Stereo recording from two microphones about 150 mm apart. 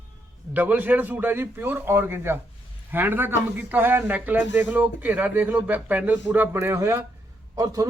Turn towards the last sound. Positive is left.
turn(degrees=-25)  # may be behind; listen again after turning